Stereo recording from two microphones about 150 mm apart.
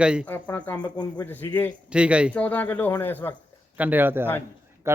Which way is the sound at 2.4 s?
10° left (ahead or behind).